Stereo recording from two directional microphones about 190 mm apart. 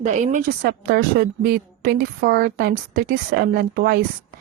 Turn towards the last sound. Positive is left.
turn(degrees=-50)  # may be behind; listen again after turning